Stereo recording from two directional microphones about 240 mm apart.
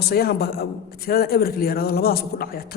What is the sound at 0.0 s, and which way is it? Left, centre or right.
A man's voice, left.